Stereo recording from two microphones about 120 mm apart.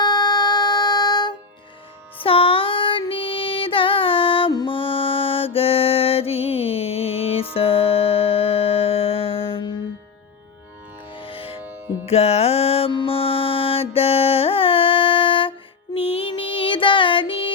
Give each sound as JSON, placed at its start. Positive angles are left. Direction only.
{"t": 0.0, "sound": "music", "side_deg": 35}
{"t": 2.1, "sound": "child singing", "side_deg": 50}
{"t": 3.1, "sound": "music", "side_deg": 50}
{"t": 4.5, "sound": "mantra", "side_deg": 45}
{"t": 11.1, "sound": "music", "side_deg": 50}